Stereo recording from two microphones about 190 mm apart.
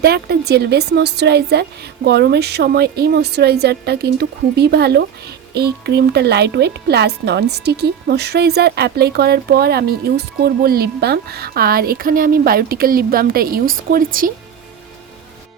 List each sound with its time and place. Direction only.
0.0 s speech: 55° right (ahead or behind)